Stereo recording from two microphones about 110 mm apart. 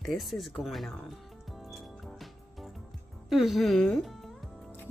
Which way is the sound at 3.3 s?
Centre (ahead or behind).